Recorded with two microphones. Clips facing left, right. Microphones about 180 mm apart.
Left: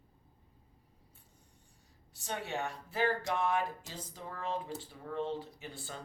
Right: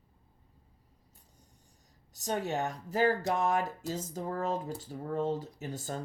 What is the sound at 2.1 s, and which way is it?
Speech, 40° right (ahead or behind).